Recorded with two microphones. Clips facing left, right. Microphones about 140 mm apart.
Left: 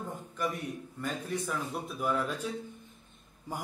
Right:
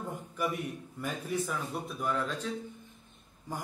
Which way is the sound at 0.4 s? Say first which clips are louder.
Right 1 dB; 10° right (ahead or behind).